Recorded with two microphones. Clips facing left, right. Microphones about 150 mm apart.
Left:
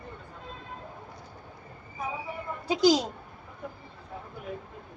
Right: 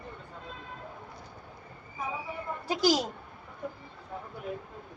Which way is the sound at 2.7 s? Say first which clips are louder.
Left 4 dB; 20° left (ahead or behind).